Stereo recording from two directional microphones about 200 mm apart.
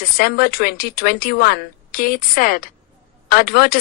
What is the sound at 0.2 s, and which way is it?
Speech, 50° left (ahead or behind).